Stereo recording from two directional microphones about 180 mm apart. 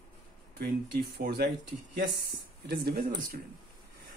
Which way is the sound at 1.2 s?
60° right (ahead or behind).